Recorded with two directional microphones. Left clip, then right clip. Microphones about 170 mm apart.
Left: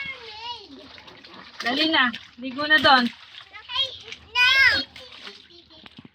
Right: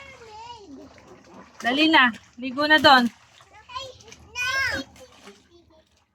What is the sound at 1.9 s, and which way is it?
Speech, 40° right (ahead or behind).